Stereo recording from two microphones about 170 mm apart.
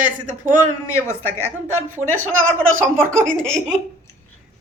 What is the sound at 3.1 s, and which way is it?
Speech, 5° left (ahead or behind).